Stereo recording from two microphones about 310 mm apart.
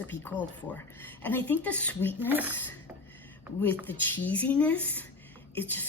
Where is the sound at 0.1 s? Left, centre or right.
Centre.